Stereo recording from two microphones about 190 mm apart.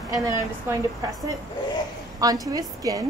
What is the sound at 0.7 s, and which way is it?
Speech, 10° right (ahead or behind).